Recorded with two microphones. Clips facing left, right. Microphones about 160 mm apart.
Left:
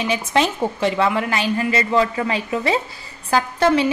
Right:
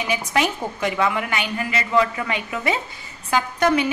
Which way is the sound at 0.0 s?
25° left (ahead or behind).